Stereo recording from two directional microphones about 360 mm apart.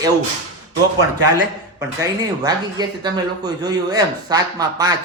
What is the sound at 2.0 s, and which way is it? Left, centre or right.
A man's voice, centre.